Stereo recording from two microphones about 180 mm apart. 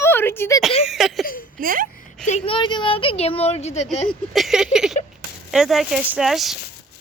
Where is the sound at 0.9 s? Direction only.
Centre (ahead or behind).